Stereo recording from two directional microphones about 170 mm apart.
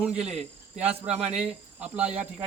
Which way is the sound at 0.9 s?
35° right (ahead or behind).